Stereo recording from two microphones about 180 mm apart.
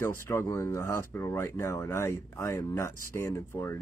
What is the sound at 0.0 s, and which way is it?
Speech, 15° left (ahead or behind).